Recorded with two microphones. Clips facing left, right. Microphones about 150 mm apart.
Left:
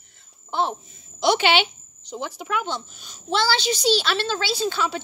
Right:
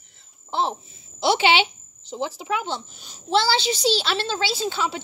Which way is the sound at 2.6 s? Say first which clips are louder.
Even; 30° right (ahead or behind).